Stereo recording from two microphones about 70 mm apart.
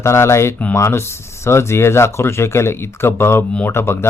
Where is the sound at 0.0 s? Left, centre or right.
Left.